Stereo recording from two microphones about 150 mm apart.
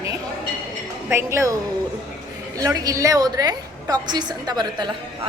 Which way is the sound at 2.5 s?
25° right (ahead or behind).